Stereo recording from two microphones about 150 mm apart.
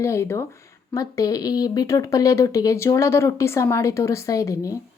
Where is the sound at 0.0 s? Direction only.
20° left (ahead or behind).